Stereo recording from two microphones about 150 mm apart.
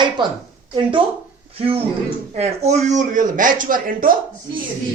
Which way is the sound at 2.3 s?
45° right (ahead or behind).